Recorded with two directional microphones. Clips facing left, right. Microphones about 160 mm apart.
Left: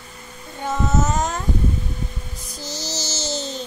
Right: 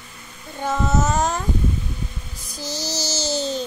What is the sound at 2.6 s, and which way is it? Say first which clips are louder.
Music: right 3 dB; 20° left (ahead or behind).